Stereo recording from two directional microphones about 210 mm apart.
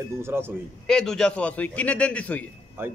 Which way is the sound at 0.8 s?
5° left (ahead or behind).